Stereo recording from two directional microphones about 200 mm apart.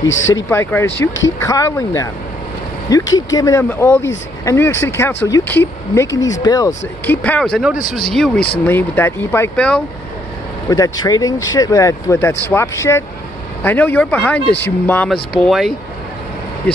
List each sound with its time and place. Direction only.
0.1 s speech: 70° left (ahead or behind)
0.5 s speech: 10° left (ahead or behind)
3.2 s speech: 20° left (ahead or behind)
7.2 s speech: 5° left (ahead or behind)
10.7 s speech: 20° left (ahead or behind)